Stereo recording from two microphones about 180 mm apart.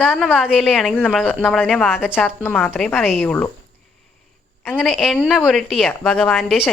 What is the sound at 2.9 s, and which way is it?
Speech, 5° right (ahead or behind).